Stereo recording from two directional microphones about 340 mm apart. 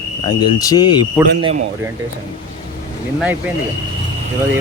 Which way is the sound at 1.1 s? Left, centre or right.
Centre.